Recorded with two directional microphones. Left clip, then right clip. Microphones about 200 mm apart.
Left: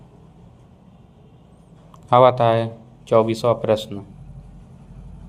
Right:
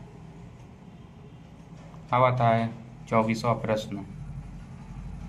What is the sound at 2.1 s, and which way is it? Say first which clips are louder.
A man's voice: left 9 dB; 45° left (ahead or behind).